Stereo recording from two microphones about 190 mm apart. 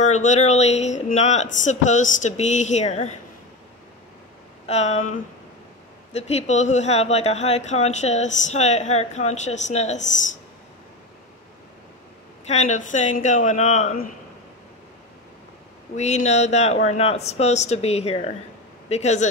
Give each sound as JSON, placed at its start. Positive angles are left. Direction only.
{"t": 0.0, "sound": "speech", "side_deg": 40}
{"t": 4.6, "sound": "speech", "side_deg": 35}
{"t": 12.7, "sound": "speech", "side_deg": 40}
{"t": 16.0, "sound": "speech", "side_deg": 35}